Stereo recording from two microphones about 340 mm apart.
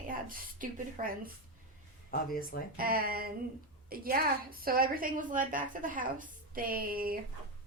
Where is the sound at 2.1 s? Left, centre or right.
Left.